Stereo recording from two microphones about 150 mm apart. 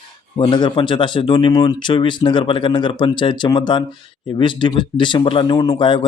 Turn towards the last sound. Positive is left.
turn(degrees=30)  # may be behind; listen again after turning